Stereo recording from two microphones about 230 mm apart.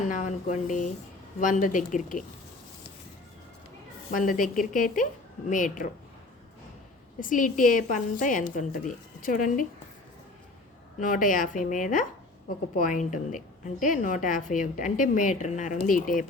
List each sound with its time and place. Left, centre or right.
0.1 s a woman's voice: left
4.1 s a woman's voice: left
7.2 s a woman's voice: left
11.0 s a woman's voice: left